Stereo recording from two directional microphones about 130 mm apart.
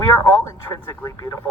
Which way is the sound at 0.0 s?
25° left (ahead or behind).